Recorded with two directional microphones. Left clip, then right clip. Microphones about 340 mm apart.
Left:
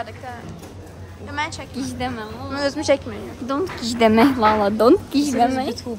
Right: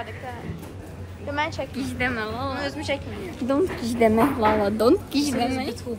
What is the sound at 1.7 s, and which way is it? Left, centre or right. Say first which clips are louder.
Speech: even; left.